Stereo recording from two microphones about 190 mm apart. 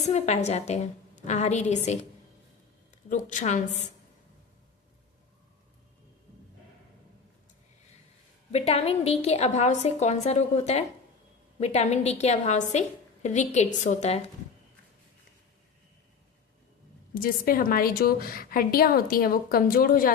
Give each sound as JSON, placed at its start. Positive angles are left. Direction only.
{"t": 0.0, "sound": "a woman's voice", "side_deg": 35}
{"t": 3.1, "sound": "a woman's voice", "side_deg": 40}
{"t": 8.5, "sound": "a woman's voice", "side_deg": 35}
{"t": 17.2, "sound": "a woman's voice", "side_deg": 50}